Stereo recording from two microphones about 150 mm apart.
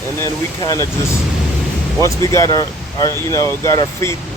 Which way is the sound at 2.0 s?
20° left (ahead or behind).